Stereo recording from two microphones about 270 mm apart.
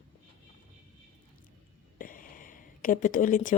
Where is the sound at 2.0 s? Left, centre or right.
Left.